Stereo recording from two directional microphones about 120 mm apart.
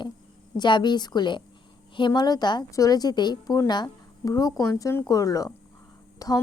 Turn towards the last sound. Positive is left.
turn(degrees=30)  # may be behind; listen again after turning